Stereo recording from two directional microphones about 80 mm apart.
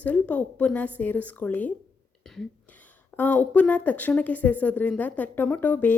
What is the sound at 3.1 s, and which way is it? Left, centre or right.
A woman's voice, left.